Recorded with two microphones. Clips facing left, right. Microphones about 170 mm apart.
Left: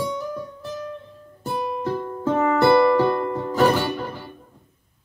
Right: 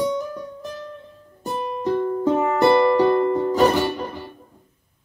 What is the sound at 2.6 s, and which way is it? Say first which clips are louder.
Music: right 1 dB; 15° right (ahead or behind).